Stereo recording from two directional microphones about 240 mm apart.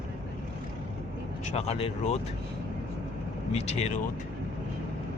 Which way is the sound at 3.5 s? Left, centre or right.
Left.